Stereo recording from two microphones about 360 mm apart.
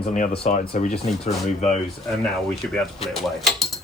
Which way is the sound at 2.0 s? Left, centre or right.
Centre.